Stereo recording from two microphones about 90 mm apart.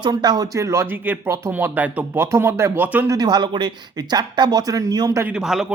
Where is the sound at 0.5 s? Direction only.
30° right (ahead or behind).